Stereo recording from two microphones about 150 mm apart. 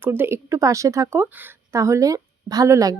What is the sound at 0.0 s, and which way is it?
Speech, 15° right (ahead or behind).